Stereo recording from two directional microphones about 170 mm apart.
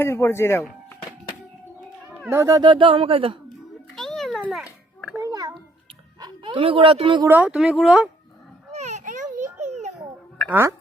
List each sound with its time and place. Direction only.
0.0 s speech: 15° left (ahead or behind)
2.3 s speech: 15° right (ahead or behind)
2.6 s speech: 30° right (ahead or behind)
3.9 s a sound: centre (ahead or behind)
5.1 s a sound: 20° right (ahead or behind)
6.1 s speech: 25° right (ahead or behind)
7.3 s speech: 10° right (ahead or behind)
8.7 s children playing: 45° right (ahead or behind)
10.5 s speech: 15° right (ahead or behind)